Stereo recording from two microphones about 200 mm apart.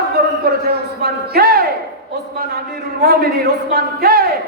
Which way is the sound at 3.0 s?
55° right (ahead or behind).